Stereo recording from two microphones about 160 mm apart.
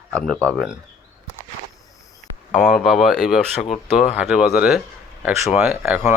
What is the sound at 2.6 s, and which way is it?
Speech, 5° left (ahead or behind).